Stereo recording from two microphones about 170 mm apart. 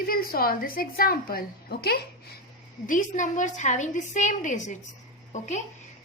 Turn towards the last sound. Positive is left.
turn(degrees=45)  # may be behind; listen again after turning